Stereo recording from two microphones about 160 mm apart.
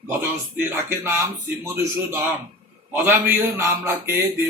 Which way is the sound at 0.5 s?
15° right (ahead or behind).